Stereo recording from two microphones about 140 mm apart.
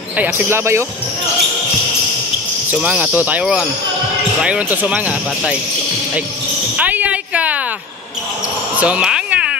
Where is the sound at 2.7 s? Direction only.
10° right (ahead or behind).